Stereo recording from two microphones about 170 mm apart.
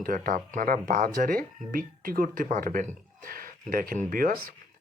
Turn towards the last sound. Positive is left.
turn(degrees=-55)  # may be behind; listen again after turning